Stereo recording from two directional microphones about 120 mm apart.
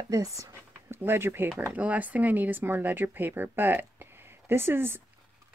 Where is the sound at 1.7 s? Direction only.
10° right (ahead or behind).